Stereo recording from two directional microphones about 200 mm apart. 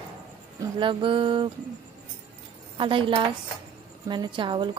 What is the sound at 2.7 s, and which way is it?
A woman's voice, 25° right (ahead or behind).